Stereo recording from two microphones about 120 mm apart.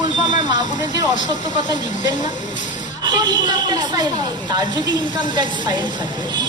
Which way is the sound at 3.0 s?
40° right (ahead or behind).